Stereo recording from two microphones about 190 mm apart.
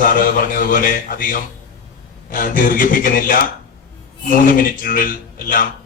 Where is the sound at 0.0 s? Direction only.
50° left (ahead or behind).